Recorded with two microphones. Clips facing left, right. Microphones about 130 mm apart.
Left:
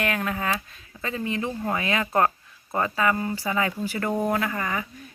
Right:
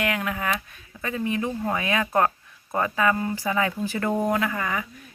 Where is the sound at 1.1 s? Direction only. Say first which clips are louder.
Right 2 dB; 15° right (ahead or behind).